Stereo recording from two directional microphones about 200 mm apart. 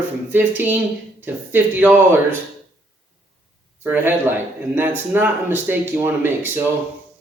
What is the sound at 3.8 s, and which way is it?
Speech, 10° right (ahead or behind).